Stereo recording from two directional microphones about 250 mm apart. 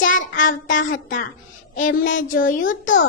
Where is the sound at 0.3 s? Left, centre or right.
Left.